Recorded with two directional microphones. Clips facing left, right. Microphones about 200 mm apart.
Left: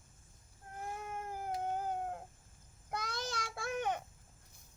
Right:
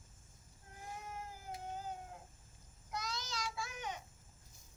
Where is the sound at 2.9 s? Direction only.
55° left (ahead or behind).